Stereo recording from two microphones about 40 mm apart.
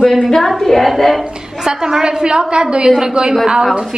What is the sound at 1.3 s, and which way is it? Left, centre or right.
A woman's voice, centre.